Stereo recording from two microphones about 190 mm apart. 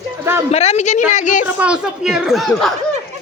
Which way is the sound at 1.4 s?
5° right (ahead or behind).